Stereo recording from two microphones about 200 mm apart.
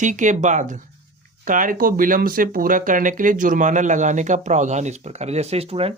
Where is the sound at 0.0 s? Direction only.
40° right (ahead or behind).